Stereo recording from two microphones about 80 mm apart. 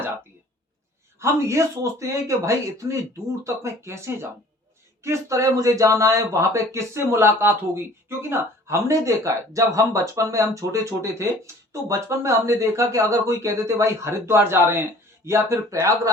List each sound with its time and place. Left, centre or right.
1.2 s speech: right